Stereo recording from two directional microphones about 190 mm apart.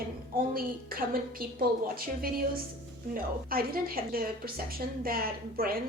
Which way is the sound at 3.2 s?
50° right (ahead or behind).